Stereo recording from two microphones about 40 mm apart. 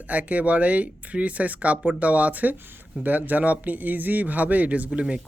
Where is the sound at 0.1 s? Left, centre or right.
Right.